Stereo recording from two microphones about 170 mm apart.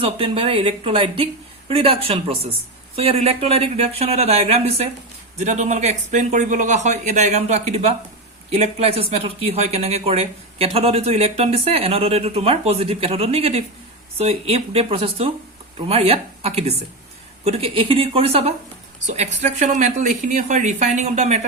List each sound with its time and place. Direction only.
0.0 s speech: 35° right (ahead or behind)